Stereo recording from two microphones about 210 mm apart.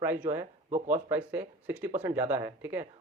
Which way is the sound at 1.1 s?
10° right (ahead or behind).